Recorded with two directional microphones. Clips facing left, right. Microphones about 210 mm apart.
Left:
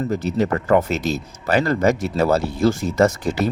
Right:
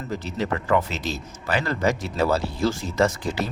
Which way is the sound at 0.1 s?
45° left (ahead or behind).